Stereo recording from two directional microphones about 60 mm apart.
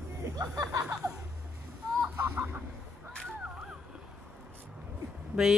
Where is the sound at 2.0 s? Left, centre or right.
Right.